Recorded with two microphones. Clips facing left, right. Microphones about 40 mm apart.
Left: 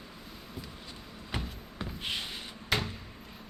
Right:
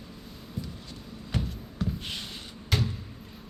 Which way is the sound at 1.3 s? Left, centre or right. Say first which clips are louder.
Right 4 dB; centre.